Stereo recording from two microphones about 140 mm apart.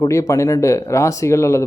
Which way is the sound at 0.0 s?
25° left (ahead or behind).